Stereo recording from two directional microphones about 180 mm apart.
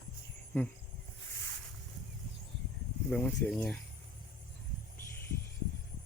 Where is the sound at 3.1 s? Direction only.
10° left (ahead or behind).